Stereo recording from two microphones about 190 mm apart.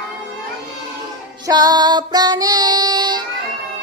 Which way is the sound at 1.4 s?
20° right (ahead or behind).